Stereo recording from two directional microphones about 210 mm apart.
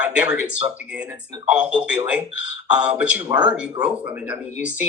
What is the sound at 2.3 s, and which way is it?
Speech, 70° left (ahead or behind).